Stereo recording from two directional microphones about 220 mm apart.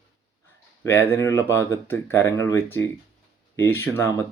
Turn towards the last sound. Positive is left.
turn(degrees=10)  # may be behind; listen again after turning